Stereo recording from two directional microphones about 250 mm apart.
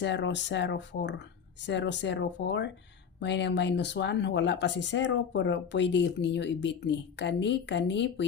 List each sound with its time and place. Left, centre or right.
0.0 s speech: left